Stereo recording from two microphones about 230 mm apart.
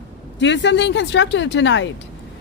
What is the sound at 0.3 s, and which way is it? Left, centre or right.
Speech, left.